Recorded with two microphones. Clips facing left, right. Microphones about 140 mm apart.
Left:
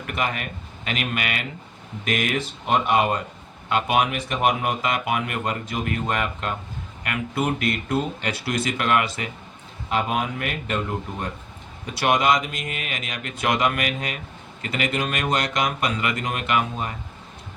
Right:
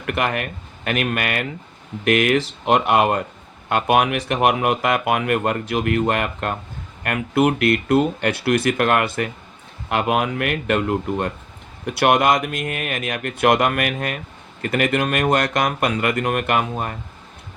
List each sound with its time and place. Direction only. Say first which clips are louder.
0.0 s speech: right 5 dB; 65° right (ahead or behind)
2.0 s speech: right 8 dB; 70° right (ahead or behind); by 9.3 s 55° right (ahead or behind)
9.9 s speech: right 4 dB; 65° right (ahead or behind); by 16.9 s 50° right (ahead or behind)